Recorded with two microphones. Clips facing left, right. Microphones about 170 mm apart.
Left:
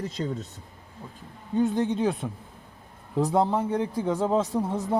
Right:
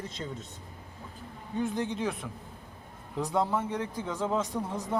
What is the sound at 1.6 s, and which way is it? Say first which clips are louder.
A woman's voice: left 7 dB; 30° left (ahead or behind).